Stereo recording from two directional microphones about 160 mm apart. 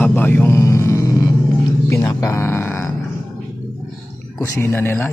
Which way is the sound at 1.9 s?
20° left (ahead or behind).